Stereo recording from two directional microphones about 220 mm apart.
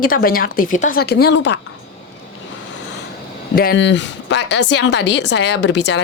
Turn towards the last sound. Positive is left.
turn(degrees=50)  # may be behind; listen again after turning